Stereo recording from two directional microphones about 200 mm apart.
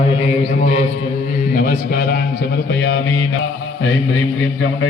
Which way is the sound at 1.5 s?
45° left (ahead or behind).